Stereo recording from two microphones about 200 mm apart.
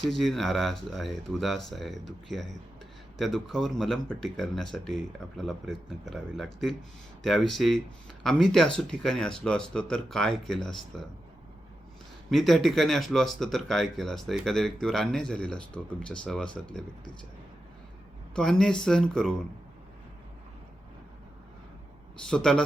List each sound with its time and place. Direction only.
0.1 s speech: centre (ahead or behind)
12.3 s speech: centre (ahead or behind)
18.3 s speech: 5° left (ahead or behind)
22.3 s speech: 5° left (ahead or behind)